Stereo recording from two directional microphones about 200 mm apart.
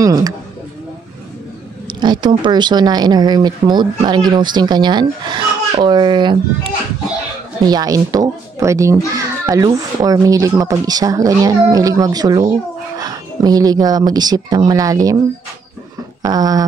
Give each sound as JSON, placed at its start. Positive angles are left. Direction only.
{"t": 0.0, "sound": "speech", "side_deg": -20}
{"t": 1.9, "sound": "speech", "side_deg": -20}
{"t": 16.2, "sound": "a sound", "side_deg": -20}